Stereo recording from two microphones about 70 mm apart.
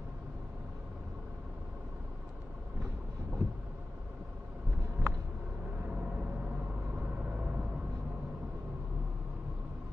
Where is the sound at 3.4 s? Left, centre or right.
Right.